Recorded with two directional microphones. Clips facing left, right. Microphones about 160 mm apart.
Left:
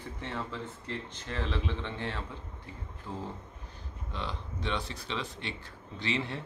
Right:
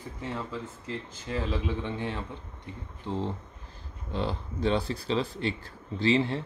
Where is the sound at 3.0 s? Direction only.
25° right (ahead or behind).